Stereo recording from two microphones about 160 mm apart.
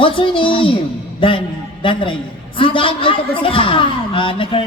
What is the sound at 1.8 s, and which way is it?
A woman's voice, 30° left (ahead or behind).